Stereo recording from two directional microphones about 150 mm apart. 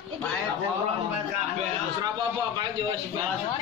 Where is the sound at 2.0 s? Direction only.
25° right (ahead or behind).